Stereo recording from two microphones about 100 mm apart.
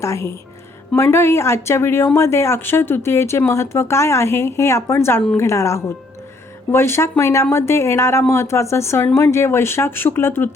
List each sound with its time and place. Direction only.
0.0 s a woman's voice: 30° left (ahead or behind)